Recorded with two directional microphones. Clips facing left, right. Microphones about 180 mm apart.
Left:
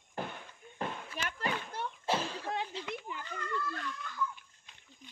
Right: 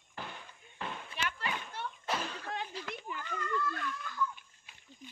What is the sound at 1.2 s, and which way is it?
Children playing, 40° left (ahead or behind).